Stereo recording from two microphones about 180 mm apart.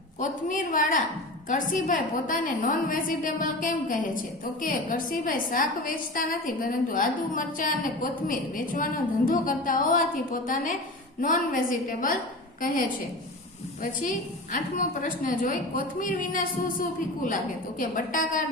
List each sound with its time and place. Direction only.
0.2 s a woman's voice: 45° left (ahead or behind)
14.0 s a woman's voice: 45° left (ahead or behind)